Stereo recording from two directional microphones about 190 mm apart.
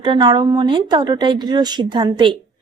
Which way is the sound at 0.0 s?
25° right (ahead or behind).